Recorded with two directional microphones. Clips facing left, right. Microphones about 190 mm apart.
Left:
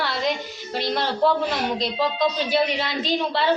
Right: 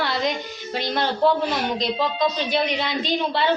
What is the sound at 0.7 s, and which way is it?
Speech, centre (ahead or behind).